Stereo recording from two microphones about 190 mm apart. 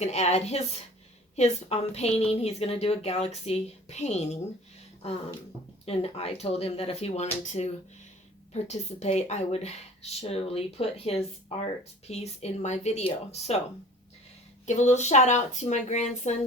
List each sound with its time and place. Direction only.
0.0 s a woman's voice: 35° left (ahead or behind)
5.8 s a woman's voice: 30° left (ahead or behind)
14.7 s a woman's voice: 40° left (ahead or behind)